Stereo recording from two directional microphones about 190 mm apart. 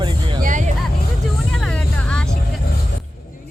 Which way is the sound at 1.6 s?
5° left (ahead or behind).